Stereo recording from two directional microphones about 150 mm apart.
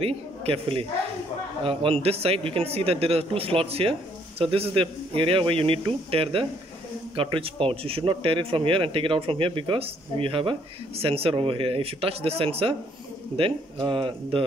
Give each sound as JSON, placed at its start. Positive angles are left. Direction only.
{"t": 0.0, "sound": "speech", "side_deg": -40}